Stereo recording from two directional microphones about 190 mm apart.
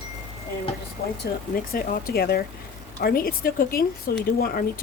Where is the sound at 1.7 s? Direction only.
50° left (ahead or behind).